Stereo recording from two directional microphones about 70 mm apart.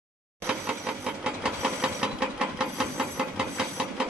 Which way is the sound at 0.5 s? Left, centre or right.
Centre.